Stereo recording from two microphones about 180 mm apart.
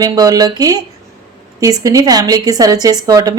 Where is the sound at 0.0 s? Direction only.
20° right (ahead or behind).